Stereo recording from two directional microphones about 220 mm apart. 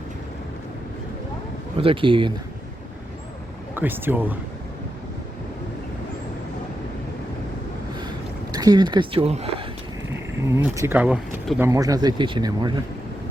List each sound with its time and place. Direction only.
1.8 s speech: 25° right (ahead or behind)
3.8 s speech: 10° right (ahead or behind)
8.5 s speech: 20° right (ahead or behind)
10.1 s speech: 10° right (ahead or behind)